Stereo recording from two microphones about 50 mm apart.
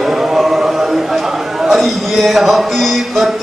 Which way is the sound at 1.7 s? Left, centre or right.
Centre.